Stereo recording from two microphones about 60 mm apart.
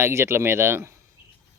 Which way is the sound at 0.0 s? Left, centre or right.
Right.